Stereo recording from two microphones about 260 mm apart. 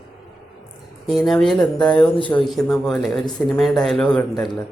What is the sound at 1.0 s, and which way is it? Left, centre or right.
Speech, centre.